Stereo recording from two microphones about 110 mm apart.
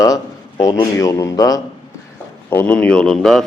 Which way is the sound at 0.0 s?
30° left (ahead or behind).